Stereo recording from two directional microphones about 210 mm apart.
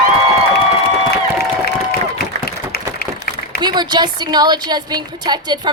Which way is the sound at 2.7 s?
50° left (ahead or behind).